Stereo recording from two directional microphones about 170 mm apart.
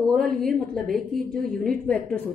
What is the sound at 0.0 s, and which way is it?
A woman's voice, centre (ahead or behind).